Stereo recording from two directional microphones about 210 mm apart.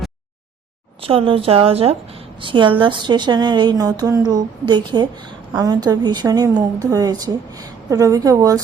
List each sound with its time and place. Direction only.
1.0 s a woman's voice: 25° right (ahead or behind)